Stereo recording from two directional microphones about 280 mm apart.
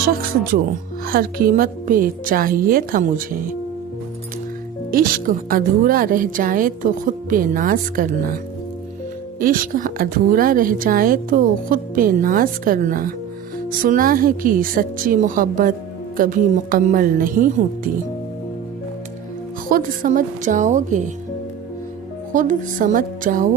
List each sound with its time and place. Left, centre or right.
0.1 s a woman's voice: right
4.9 s speech: right
9.4 s speech: right
19.6 s speech: right
22.3 s speech: right